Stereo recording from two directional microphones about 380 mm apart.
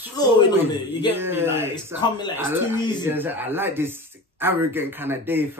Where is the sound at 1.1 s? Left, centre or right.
Centre.